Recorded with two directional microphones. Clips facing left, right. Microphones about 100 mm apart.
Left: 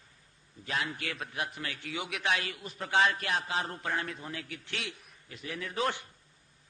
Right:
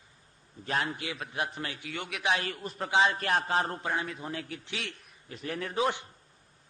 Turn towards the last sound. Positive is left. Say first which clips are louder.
# right 3 dB
turn(degrees=-20)  # may be behind; listen again after turning